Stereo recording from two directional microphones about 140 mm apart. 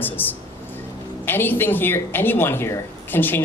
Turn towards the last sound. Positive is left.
turn(degrees=15)  # may be behind; listen again after turning